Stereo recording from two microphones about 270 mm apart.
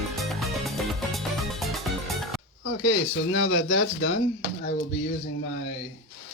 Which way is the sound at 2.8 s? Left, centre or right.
Left.